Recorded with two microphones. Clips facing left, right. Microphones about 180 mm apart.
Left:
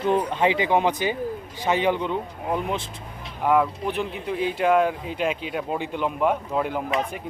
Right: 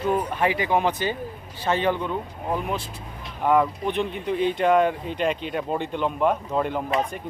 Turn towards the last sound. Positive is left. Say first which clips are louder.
# even
turn(degrees=5)  # may be behind; listen again after turning